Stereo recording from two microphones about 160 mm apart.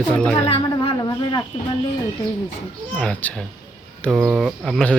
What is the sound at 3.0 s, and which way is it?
Speech, 10° left (ahead or behind).